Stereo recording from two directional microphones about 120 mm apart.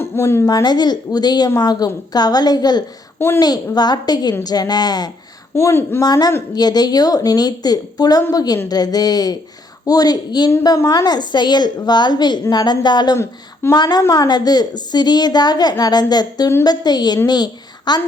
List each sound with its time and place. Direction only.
0.0 s a woman's voice: 20° left (ahead or behind)
3.2 s a woman's voice: 20° left (ahead or behind)
3.4 s a woman's voice: 35° left (ahead or behind)
5.5 s speech: 20° left (ahead or behind)
6.0 s a woman's voice: 35° left (ahead or behind)
13.1 s speech: 20° left (ahead or behind)
13.7 s a woman's voice: 35° left (ahead or behind)